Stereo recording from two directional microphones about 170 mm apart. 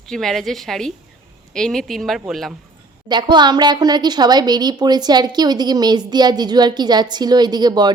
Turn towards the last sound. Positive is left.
turn(degrees=-25)  # may be behind; listen again after turning